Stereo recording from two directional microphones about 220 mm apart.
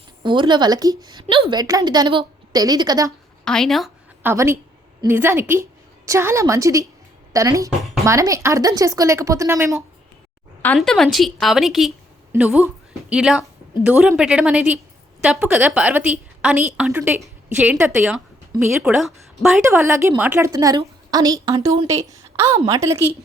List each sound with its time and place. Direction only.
0.2 s a woman's voice: 20° right (ahead or behind)
3.4 s a sound: 5° left (ahead or behind)
4.3 s a woman's voice: 10° right (ahead or behind)
10.6 s a woman's voice: 5° left (ahead or behind); by 23.0 s 15° right (ahead or behind)